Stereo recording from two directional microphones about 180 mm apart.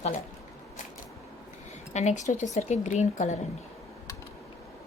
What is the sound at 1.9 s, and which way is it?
A woman's voice, 40° left (ahead or behind).